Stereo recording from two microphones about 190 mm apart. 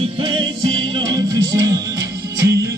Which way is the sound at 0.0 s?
25° right (ahead or behind).